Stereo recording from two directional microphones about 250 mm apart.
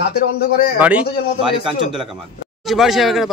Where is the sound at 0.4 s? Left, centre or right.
Left.